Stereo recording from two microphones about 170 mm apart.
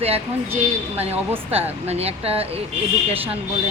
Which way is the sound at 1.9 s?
35° right (ahead or behind).